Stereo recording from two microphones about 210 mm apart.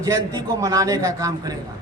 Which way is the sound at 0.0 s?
15° right (ahead or behind).